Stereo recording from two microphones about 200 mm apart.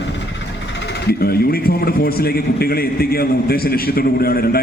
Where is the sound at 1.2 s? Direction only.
50° left (ahead or behind).